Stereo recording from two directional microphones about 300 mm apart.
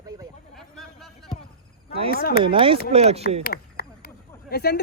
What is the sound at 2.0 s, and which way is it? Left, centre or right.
Speech, left.